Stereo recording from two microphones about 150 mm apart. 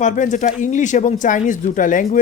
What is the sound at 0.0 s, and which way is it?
Speech, 55° left (ahead or behind).